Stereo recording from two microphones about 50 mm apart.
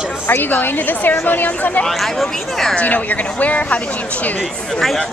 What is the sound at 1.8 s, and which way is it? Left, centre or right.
Speech, centre.